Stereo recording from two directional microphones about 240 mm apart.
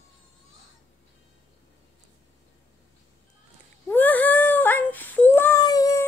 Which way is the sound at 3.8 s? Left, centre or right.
Centre.